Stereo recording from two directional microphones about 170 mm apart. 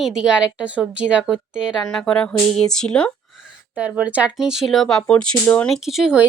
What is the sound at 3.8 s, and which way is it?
A woman's voice, 10° right (ahead or behind).